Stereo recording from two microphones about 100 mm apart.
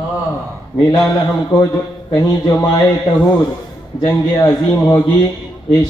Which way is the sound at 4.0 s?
35° left (ahead or behind).